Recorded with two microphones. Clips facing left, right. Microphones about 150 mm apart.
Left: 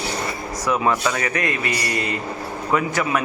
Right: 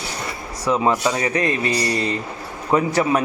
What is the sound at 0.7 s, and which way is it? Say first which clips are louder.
A man's voice: right 2 dB; 25° right (ahead or behind).